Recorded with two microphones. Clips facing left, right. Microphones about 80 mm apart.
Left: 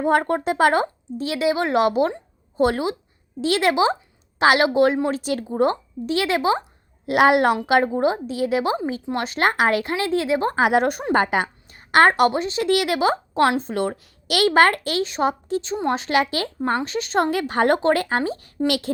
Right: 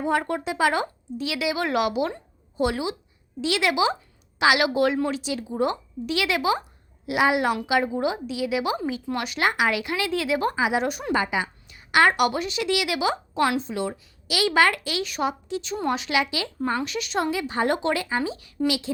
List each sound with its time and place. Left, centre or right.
0.0 s a woman's voice: left
5.2 s speech: left
7.0 s a woman's voice: left
7.9 s speech: left
10.5 s a woman's voice: left
15.0 s speech: left
15.7 s a woman's voice: left